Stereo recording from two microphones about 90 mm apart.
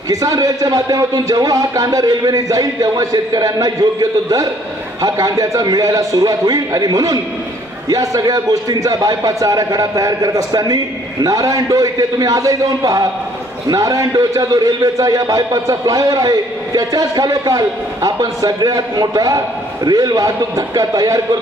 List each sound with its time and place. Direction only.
0.1 s a man's voice: 40° right (ahead or behind)